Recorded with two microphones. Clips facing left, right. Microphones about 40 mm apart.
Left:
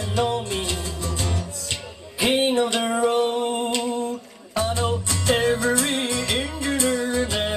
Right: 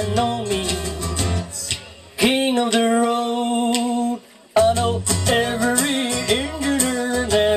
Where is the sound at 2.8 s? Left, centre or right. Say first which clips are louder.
Right 3 dB; centre.